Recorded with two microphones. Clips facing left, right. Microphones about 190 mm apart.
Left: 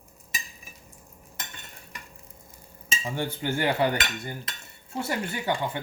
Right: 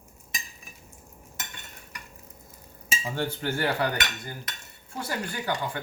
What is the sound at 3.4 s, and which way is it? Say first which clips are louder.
Speech: left 3 dB; 20° left (ahead or behind).